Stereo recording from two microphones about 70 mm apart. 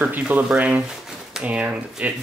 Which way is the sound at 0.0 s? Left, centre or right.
Right.